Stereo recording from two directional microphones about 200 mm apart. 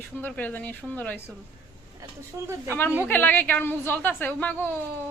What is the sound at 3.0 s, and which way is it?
Speech, 10° left (ahead or behind).